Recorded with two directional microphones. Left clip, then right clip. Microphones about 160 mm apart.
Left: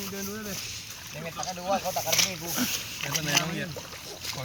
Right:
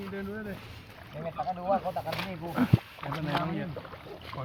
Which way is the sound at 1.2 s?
60° right (ahead or behind).